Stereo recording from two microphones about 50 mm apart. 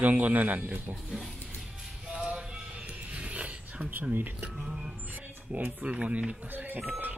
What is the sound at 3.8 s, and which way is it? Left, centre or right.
Speech, right.